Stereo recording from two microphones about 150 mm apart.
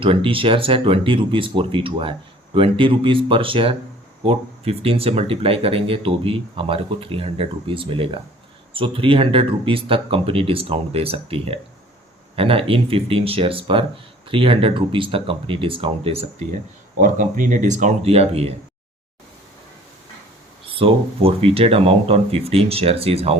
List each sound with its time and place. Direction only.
0.0 s speech: 35° right (ahead or behind)
17.0 s speech: 60° right (ahead or behind); by 18.5 s 45° right (ahead or behind)
20.7 s speech: 40° right (ahead or behind)